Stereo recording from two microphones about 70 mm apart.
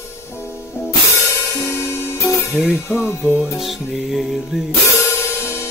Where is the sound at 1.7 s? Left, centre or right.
Left.